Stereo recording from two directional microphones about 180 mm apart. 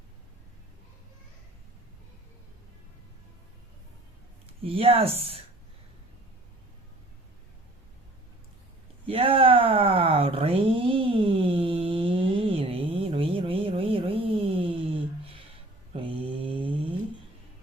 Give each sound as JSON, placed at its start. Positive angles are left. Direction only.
{"t": 4.6, "sound": "speech", "side_deg": -30}
{"t": 9.0, "sound": "a sound", "side_deg": -30}
{"t": 15.9, "sound": "mantra", "side_deg": -30}